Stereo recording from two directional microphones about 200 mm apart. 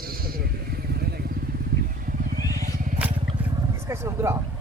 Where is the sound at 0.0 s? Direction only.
50° right (ahead or behind).